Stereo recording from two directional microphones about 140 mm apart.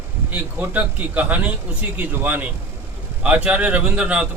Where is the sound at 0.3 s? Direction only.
15° right (ahead or behind).